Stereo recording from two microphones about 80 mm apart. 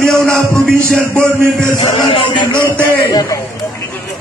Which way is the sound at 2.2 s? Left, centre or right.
Left.